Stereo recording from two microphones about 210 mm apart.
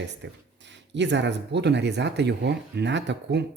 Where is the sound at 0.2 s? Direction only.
55° right (ahead or behind).